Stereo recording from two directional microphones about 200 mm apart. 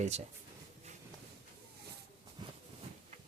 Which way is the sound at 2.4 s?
20° right (ahead or behind).